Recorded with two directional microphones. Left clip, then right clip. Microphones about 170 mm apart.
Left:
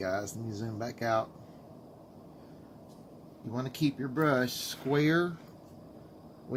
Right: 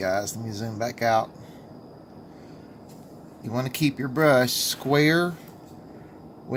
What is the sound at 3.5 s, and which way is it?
Speech, 50° right (ahead or behind).